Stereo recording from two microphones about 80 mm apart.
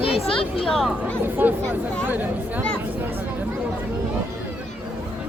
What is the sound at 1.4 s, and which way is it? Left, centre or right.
Speech, right.